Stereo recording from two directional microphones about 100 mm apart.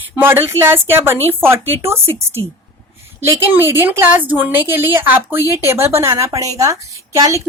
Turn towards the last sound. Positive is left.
turn(degrees=-35)  # may be behind; listen again after turning